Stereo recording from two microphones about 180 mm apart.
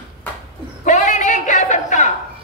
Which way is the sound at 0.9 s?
40° left (ahead or behind).